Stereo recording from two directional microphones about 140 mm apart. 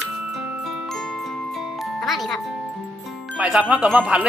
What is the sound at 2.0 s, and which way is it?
Music, centre (ahead or behind).